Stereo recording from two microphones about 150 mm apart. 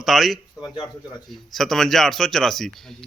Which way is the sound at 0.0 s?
Centre (ahead or behind).